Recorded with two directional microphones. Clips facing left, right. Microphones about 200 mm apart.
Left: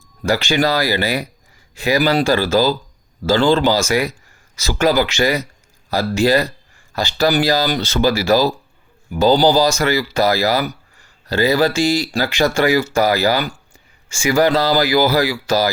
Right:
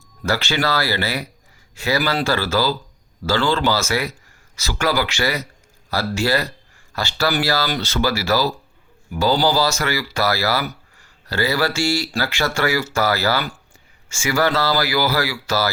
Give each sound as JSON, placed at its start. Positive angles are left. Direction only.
{"t": 0.2, "sound": "speech", "side_deg": 15}